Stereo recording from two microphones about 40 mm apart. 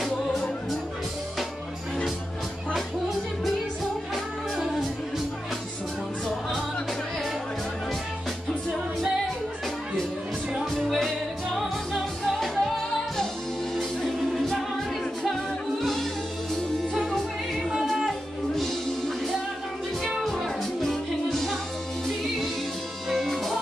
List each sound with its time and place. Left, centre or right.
10.8 s music: centre
13.7 s music: centre
20.3 s music: centre
23.0 s music: centre